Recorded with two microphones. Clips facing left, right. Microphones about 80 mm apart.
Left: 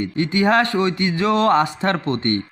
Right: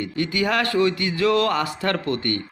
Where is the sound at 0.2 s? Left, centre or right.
Left.